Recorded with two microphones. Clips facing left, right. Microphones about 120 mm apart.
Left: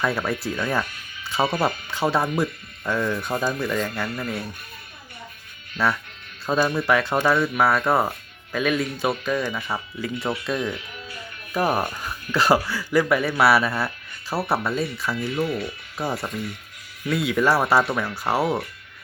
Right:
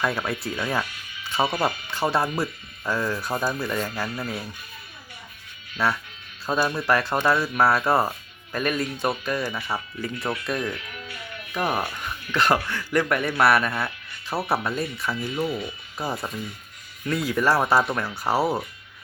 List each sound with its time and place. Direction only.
0.0 s speech: centre (ahead or behind)
5.7 s speech: centre (ahead or behind)
10.2 s speech: 25° left (ahead or behind)
11.1 s music: 35° left (ahead or behind)
11.9 s speech: 5° left (ahead or behind)